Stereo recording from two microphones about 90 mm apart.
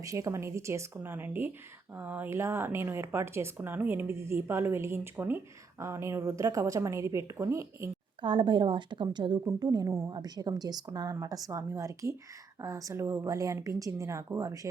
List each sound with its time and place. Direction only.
0.0 s a woman's voice: 35° right (ahead or behind)
8.2 s a woman's voice: 60° right (ahead or behind)
9.6 s a woman's voice: 45° right (ahead or behind)